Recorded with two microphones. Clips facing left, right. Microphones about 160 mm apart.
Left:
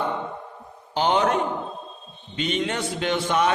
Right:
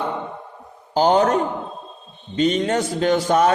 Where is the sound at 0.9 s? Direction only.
40° right (ahead or behind).